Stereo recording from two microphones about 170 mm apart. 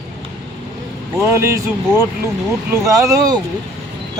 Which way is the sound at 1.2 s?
15° right (ahead or behind).